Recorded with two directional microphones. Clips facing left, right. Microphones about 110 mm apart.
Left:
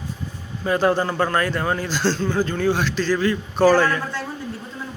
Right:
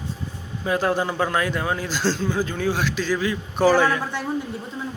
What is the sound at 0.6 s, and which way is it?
A man's voice, 5° right (ahead or behind).